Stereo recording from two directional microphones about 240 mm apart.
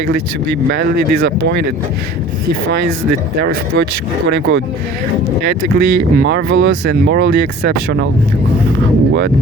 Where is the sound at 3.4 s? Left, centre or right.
Right.